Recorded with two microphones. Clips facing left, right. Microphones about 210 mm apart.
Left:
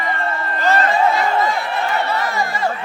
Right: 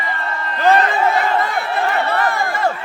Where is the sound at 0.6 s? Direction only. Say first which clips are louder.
Right 2 dB; 55° right (ahead or behind).